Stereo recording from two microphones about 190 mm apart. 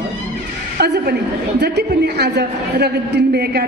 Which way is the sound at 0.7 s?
60° right (ahead or behind).